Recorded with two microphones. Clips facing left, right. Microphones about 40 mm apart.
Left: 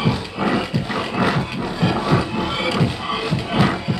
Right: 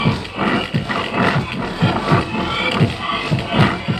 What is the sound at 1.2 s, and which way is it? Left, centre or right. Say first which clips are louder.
Roar: right 2 dB; centre.